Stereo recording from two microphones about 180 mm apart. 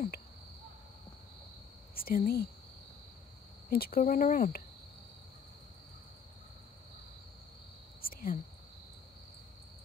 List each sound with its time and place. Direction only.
2.0 s speech: 55° left (ahead or behind)
3.7 s speech: 55° left (ahead or behind)
8.0 s whispering: 55° left (ahead or behind)